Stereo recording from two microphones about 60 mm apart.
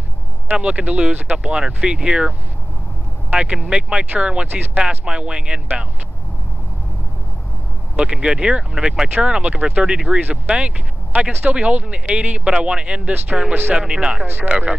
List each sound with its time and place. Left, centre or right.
0.6 s speech: centre
4.5 s speech: right
4.8 s speech: centre
8.0 s speech: centre
13.5 s speech: right
13.7 s speech: centre
14.2 s speech: right
14.5 s speech: right